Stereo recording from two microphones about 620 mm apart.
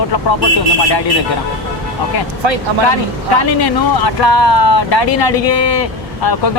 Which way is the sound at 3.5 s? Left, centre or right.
Left.